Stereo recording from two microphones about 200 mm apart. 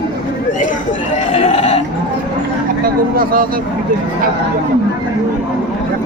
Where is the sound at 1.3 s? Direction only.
30° left (ahead or behind).